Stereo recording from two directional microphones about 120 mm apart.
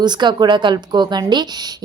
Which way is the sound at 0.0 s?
40° right (ahead or behind).